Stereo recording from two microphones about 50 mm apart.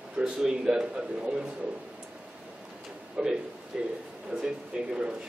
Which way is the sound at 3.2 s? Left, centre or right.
Centre.